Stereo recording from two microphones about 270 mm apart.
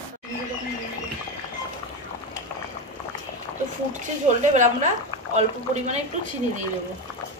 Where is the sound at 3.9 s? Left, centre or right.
Right.